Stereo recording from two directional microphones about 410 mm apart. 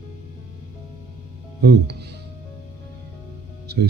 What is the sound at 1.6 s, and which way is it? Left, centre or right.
Speech, right.